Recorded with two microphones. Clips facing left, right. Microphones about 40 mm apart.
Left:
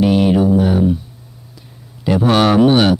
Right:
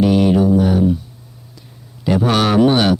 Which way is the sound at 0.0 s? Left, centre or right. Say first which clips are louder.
Even; centre.